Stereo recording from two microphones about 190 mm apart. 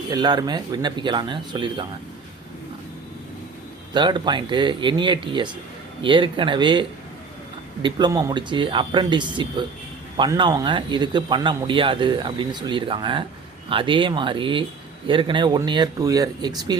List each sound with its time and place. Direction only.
0.1 s speech: 20° right (ahead or behind)
3.9 s speech: 25° right (ahead or behind)